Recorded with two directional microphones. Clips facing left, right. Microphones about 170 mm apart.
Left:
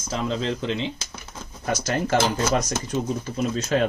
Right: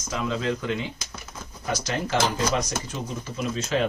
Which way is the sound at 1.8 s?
50° left (ahead or behind).